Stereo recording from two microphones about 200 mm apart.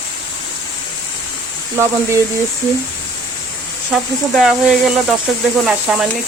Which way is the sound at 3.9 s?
5° right (ahead or behind).